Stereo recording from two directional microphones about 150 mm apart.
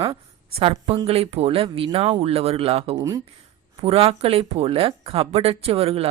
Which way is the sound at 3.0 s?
20° right (ahead or behind).